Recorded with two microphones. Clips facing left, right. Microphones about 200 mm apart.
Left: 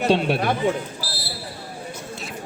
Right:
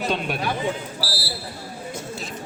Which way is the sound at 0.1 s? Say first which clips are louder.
Left 6 dB; 30° left (ahead or behind).